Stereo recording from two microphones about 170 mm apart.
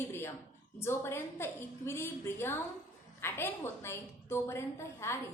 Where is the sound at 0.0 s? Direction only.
15° left (ahead or behind).